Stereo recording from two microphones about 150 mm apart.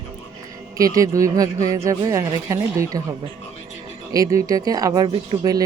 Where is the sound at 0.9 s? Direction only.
20° right (ahead or behind).